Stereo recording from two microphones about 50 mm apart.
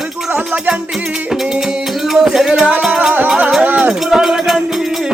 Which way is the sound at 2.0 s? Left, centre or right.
Centre.